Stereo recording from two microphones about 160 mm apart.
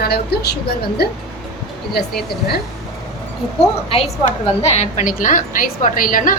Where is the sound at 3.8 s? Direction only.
40° left (ahead or behind); by 6.3 s 60° left (ahead or behind).